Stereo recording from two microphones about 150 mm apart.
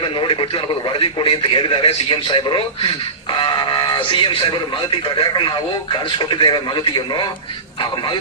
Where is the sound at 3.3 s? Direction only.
30° left (ahead or behind).